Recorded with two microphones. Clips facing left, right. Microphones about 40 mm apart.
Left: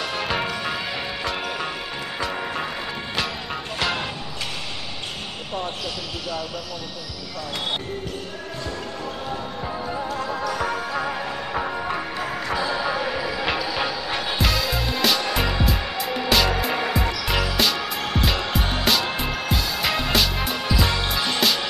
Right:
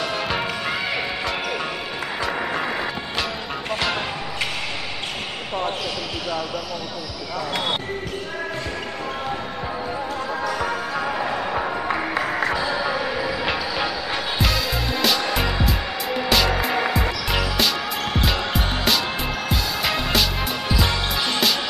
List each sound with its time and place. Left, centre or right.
0.1 s music: centre
2.1 s music: centre
9.9 s music: centre
12.2 s music: right
12.5 s music: centre